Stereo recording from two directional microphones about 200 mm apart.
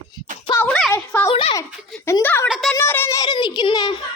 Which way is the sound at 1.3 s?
25° left (ahead or behind).